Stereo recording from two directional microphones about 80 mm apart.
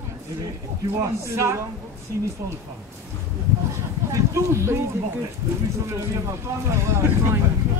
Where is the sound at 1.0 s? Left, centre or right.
Right.